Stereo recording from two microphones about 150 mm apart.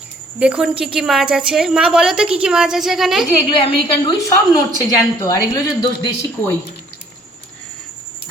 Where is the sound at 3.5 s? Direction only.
35° left (ahead or behind).